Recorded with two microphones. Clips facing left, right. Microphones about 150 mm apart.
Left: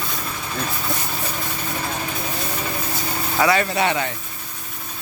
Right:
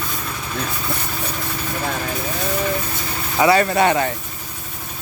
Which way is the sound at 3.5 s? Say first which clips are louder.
Right 4 dB; 45° right (ahead or behind).